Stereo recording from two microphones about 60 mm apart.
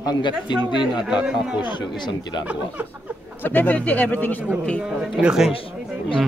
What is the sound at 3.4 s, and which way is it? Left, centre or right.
Speech, left.